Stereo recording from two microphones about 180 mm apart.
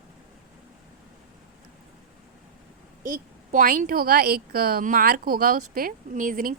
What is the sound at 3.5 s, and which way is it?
A woman's voice, 50° right (ahead or behind).